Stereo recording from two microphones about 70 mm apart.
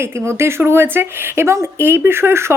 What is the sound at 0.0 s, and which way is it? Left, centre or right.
Speech, right.